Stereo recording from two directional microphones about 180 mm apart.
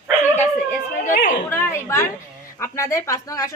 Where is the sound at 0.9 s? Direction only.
45° left (ahead or behind).